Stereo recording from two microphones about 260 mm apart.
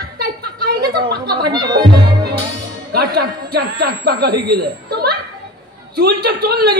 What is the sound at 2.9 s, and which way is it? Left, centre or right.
A woman's voice, right.